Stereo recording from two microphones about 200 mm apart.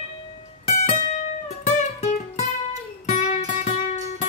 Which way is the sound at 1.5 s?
35° left (ahead or behind).